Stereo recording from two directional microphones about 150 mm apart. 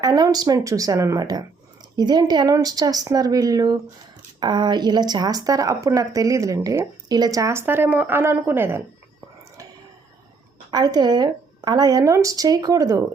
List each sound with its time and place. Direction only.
0.0 s speech: 25° right (ahead or behind)
10.7 s speech: 25° right (ahead or behind)